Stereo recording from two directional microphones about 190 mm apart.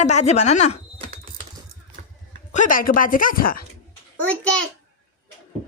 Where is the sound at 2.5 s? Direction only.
45° left (ahead or behind).